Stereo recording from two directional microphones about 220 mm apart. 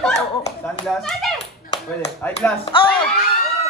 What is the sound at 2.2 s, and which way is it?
Speech, 10° left (ahead or behind).